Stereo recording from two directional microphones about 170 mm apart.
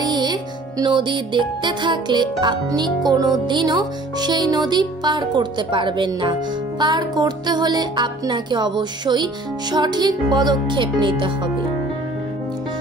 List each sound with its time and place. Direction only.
0.0 s music: 25° right (ahead or behind)